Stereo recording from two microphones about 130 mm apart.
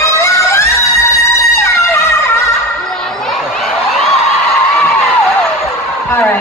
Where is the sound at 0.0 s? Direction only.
20° left (ahead or behind).